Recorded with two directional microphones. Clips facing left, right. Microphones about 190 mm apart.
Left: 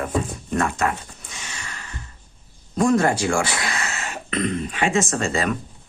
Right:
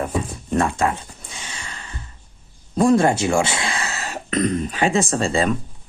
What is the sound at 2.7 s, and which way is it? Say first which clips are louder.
Speech: right 3 dB; 30° right (ahead or behind).